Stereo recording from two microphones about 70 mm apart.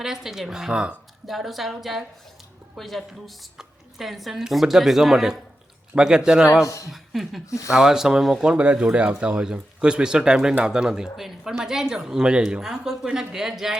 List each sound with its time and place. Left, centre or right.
0.0 s speech: centre
1.3 s a woman's voice: centre
6.7 s speech: left
6.9 s speech: centre